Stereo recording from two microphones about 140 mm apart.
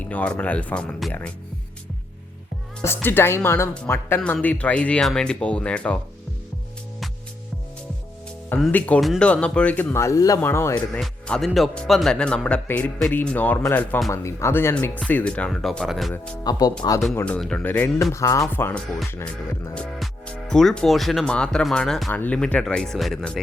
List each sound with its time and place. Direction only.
0.1 s speech: 10° left (ahead or behind)
2.8 s speech: 15° left (ahead or behind)
8.5 s speech: 5° left (ahead or behind)
10.8 s speech: 5° left (ahead or behind)
16.4 s speech: 30° left (ahead or behind)
17.2 s speech: 10° left (ahead or behind)